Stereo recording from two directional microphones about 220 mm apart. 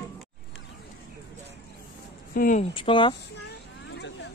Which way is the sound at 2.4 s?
35° left (ahead or behind).